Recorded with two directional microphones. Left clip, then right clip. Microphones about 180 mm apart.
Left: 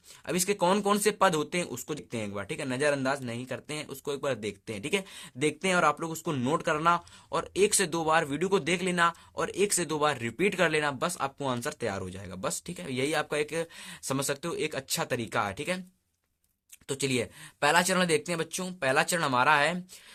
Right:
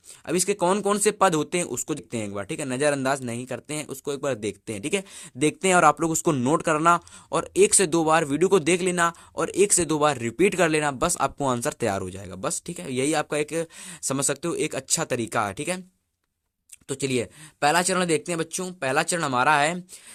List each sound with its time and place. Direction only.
0.3 s speech: 35° right (ahead or behind)
16.9 s speech: 30° right (ahead or behind)